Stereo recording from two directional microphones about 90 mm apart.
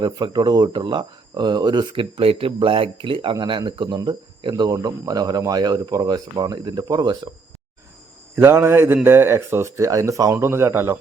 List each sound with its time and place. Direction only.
0.0 s speech: 50° right (ahead or behind)
8.4 s mantra: 25° right (ahead or behind)
9.0 s speech: 25° right (ahead or behind)
10.3 s mantra: 25° right (ahead or behind)